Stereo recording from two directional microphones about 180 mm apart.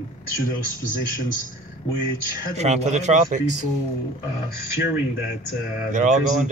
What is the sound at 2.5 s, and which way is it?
Speech, 40° right (ahead or behind).